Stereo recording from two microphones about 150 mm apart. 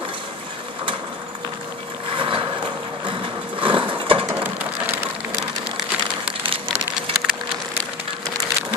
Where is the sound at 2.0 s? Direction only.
35° right (ahead or behind).